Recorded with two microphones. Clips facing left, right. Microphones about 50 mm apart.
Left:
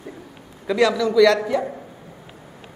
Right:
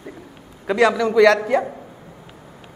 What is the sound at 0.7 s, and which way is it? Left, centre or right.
Speech, right.